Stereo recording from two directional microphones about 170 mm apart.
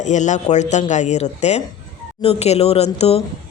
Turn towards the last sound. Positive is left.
turn(degrees=35)  # may be behind; listen again after turning